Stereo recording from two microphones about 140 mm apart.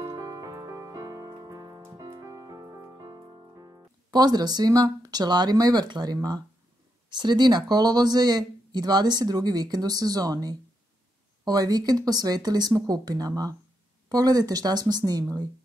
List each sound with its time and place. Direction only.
0.0 s music: 25° right (ahead or behind)
7.1 s speech: 30° right (ahead or behind)